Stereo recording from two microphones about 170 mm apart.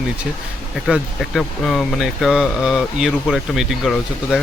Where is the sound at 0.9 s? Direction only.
Centre (ahead or behind).